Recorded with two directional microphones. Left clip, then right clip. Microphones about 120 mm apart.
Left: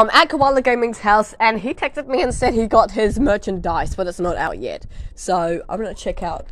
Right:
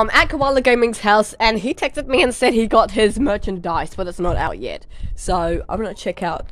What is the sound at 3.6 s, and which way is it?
Speech, 10° right (ahead or behind).